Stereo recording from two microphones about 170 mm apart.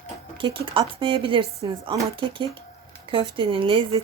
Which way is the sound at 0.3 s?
30° right (ahead or behind).